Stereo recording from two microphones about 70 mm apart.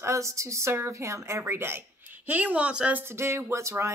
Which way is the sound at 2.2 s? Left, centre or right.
Right.